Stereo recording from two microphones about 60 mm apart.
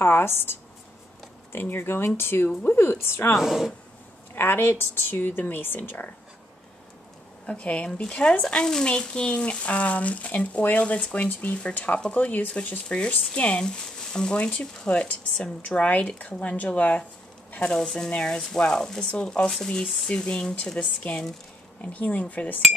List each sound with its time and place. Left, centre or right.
0.0 s a woman's voice: left
3.3 s speech: centre
4.4 s a woman's voice: left
7.4 s speech: left
17.6 s speech: centre
21.8 s speech: left